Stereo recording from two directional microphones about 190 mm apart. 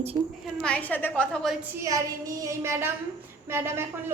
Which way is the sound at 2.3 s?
15° right (ahead or behind).